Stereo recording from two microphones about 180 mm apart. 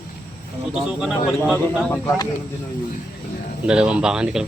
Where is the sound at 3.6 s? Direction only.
5° right (ahead or behind).